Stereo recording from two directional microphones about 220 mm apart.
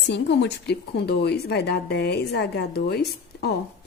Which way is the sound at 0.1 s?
50° left (ahead or behind).